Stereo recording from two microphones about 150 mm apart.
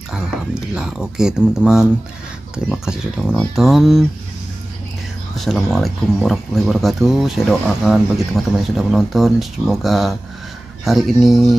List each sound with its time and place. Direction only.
0.1 s speech: 5° right (ahead or behind)
5.3 s speech: centre (ahead or behind)